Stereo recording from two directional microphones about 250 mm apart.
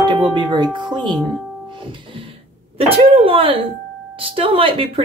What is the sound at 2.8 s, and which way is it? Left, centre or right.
Speech, right.